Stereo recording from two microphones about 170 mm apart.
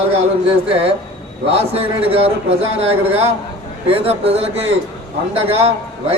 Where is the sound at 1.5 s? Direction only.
35° right (ahead or behind).